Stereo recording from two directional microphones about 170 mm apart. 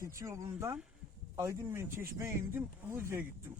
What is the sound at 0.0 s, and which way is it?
Speech, 15° right (ahead or behind).